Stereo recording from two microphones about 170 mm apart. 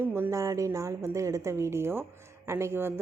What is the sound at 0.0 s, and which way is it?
A woman's voice, 15° right (ahead or behind).